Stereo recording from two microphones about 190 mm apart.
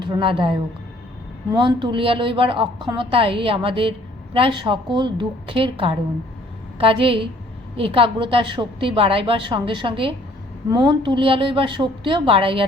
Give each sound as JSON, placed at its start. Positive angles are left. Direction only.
{"t": 0.0, "sound": "a woman's voice", "side_deg": -25}